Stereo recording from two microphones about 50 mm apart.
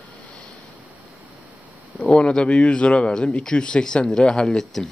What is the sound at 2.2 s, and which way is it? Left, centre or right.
Speech, left.